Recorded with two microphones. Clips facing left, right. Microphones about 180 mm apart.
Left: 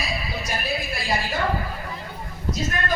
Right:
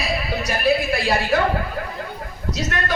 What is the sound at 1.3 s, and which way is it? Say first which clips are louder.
Speech: right 9 dB; 70° right (ahead or behind).